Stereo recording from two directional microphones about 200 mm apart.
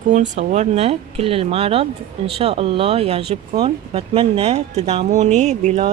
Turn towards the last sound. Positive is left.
turn(degrees=-35)  # may be behind; listen again after turning